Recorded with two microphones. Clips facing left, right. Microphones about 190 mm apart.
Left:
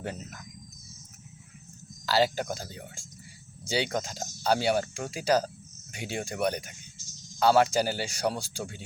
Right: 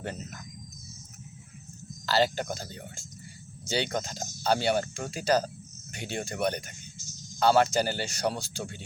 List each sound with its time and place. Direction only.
0.0 s speech: 10° left (ahead or behind)
2.0 s speech: 10° left (ahead or behind)